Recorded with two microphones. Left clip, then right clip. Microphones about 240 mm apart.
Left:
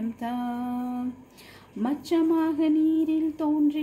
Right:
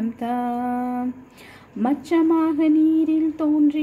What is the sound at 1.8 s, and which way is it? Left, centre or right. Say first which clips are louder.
A woman's voice: right 5 dB; centre.